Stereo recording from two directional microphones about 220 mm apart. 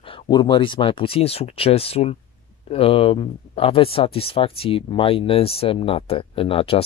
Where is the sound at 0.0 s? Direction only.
20° left (ahead or behind).